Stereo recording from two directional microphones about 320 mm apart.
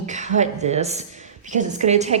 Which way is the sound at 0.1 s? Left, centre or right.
Right.